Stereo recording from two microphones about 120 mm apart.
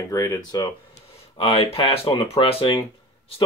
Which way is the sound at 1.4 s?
55° left (ahead or behind).